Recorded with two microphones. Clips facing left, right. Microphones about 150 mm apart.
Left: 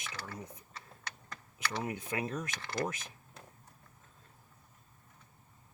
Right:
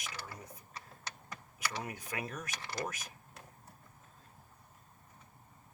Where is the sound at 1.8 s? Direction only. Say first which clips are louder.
Left 5 dB; 25° left (ahead or behind).